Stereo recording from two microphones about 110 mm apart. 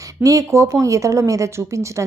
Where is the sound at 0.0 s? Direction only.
30° right (ahead or behind).